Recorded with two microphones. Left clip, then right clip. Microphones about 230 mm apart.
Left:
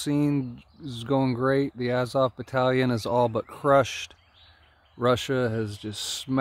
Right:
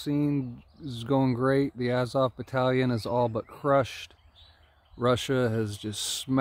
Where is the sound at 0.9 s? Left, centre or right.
Centre.